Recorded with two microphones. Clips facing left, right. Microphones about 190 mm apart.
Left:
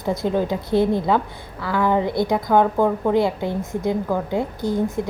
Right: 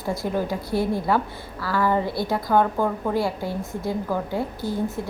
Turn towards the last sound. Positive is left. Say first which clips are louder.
# left 4 dB
turn(degrees=20)  # may be behind; listen again after turning